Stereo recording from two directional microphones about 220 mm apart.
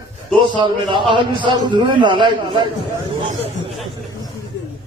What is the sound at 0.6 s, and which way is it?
A man's voice, 20° right (ahead or behind).